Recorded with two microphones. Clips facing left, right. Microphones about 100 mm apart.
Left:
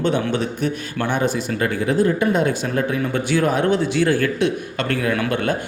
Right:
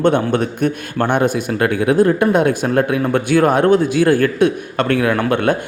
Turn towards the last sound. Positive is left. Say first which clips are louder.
# right 5 dB
turn(degrees=-55)  # may be behind; listen again after turning